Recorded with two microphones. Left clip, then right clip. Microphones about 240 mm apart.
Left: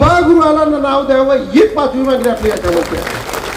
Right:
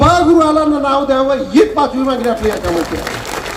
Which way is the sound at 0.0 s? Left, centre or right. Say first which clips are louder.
Left 1 dB; right.